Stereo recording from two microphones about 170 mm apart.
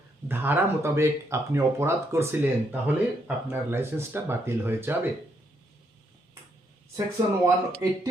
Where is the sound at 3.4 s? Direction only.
15° right (ahead or behind).